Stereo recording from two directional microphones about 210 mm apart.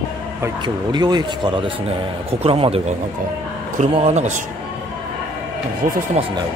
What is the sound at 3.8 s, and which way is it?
Speech, 30° right (ahead or behind).